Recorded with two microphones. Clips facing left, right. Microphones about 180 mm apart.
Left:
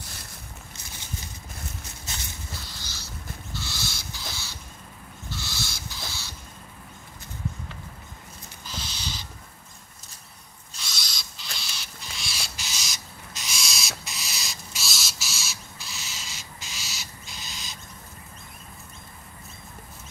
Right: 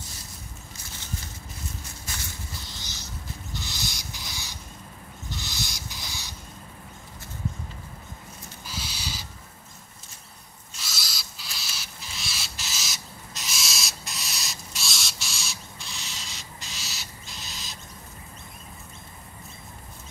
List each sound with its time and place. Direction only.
2.1 s walk: 20° left (ahead or behind)
2.8 s a sound: 20° right (ahead or behind)
3.5 s owl: 15° right (ahead or behind)
8.6 s owl: 10° right (ahead or behind)
10.8 s owl: 5° right (ahead or behind)